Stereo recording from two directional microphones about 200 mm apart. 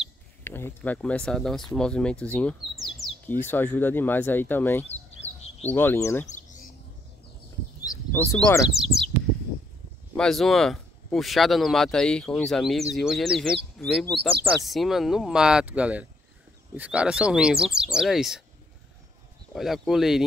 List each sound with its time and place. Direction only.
0.4 s speech: 10° left (ahead or behind)
7.8 s bird: 15° left (ahead or behind)
8.7 s bird: centre (ahead or behind)
10.1 s speech: centre (ahead or behind)
19.5 s speech: centre (ahead or behind)